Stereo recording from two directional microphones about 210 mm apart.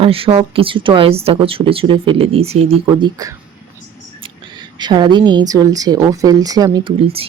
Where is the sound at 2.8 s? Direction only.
15° right (ahead or behind).